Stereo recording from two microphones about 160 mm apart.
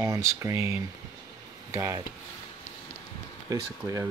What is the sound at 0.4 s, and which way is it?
Speech, 15° right (ahead or behind).